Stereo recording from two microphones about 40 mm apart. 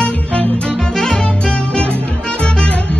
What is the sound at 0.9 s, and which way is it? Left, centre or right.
Music, centre.